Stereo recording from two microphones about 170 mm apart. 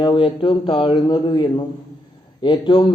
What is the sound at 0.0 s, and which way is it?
A man's voice, 30° left (ahead or behind).